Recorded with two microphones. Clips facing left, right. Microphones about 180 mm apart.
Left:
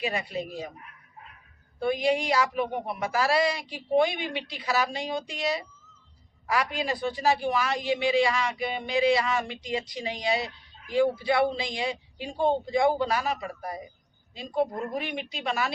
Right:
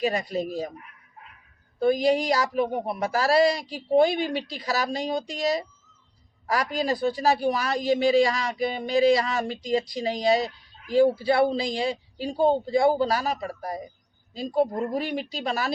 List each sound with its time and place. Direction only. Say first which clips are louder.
0.0 s a woman's voice: right 5 dB; 40° right (ahead or behind)
1.8 s a woman's voice: right 4 dB; 40° right (ahead or behind)